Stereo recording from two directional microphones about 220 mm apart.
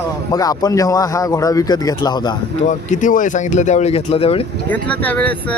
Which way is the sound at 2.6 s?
35° left (ahead or behind).